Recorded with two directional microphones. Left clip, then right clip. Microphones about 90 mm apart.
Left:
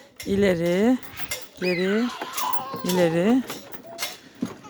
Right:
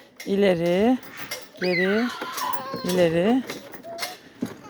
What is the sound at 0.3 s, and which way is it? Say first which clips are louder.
Speech: right 1 dB; 25° left (ahead or behind).